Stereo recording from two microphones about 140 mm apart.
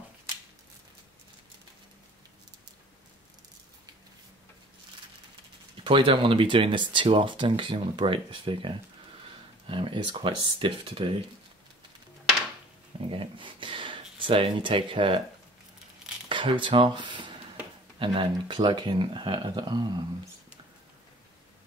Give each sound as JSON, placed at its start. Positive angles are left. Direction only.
{"t": 5.9, "sound": "speech", "side_deg": -40}
{"t": 13.1, "sound": "speech", "side_deg": -40}
{"t": 16.3, "sound": "speech", "side_deg": -35}